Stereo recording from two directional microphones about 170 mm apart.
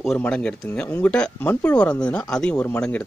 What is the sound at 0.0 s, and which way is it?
Speech, 5° left (ahead or behind).